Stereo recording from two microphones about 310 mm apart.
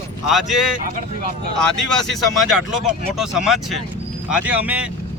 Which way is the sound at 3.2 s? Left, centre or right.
Centre.